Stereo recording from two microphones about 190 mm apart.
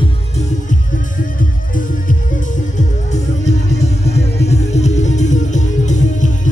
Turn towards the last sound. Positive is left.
turn(degrees=40)  # may be behind; listen again after turning